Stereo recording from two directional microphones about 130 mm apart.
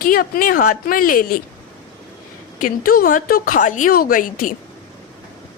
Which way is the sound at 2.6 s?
90° left.